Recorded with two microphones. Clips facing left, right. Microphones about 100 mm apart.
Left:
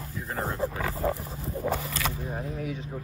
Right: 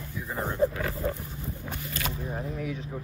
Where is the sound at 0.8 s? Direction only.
90° left.